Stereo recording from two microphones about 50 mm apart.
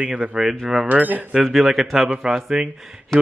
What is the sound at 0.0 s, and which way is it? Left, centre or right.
Speech, centre.